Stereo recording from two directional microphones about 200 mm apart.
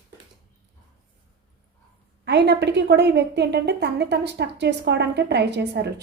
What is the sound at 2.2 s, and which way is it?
A woman's voice, 60° right (ahead or behind).